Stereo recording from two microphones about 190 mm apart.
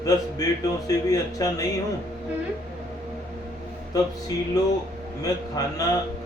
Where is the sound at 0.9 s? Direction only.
20° left (ahead or behind).